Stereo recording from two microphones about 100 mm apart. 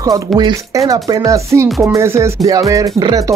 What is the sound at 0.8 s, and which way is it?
Speech, 40° right (ahead or behind).